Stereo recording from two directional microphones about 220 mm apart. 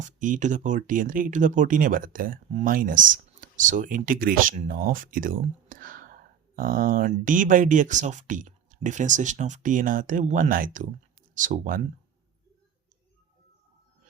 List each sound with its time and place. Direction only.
0.0 s speech: 35° right (ahead or behind)